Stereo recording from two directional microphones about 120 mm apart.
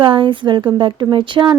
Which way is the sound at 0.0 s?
45° right (ahead or behind).